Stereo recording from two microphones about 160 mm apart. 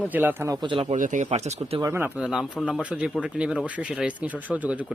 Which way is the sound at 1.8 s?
15° right (ahead or behind).